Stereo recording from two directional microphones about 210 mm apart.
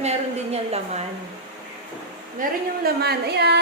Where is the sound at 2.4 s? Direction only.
50° right (ahead or behind).